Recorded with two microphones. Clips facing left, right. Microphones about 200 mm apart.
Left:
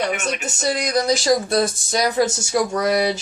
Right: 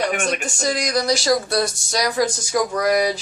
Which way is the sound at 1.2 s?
20° left (ahead or behind).